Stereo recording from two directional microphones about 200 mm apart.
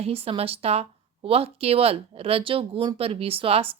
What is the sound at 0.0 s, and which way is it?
Speech, 30° right (ahead or behind).